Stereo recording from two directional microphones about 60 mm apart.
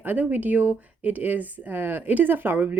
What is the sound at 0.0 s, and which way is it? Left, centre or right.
Speech, right.